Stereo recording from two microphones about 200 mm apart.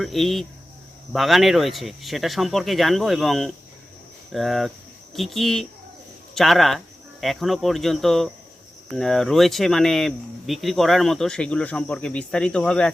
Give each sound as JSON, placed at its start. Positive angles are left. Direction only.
{"t": 0.0, "sound": "speech", "side_deg": 0}